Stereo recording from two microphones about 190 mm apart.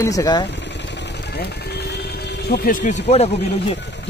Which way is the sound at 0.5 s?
65° left (ahead or behind).